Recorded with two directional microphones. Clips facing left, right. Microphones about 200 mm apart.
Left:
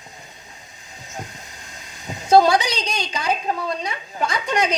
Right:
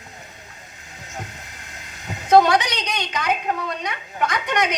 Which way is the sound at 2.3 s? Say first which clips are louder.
Even; 30° left (ahead or behind).